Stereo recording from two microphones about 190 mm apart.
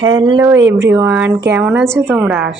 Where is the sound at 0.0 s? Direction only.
25° right (ahead or behind); by 2.0 s centre (ahead or behind).